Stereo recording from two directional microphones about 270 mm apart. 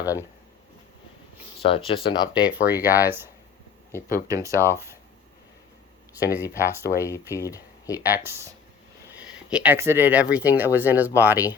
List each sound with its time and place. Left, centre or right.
0.0 s speech: centre
1.6 s speech: centre
2.3 s speech: centre
6.1 s speech: centre
7.3 s speech: centre
8.0 s speech: centre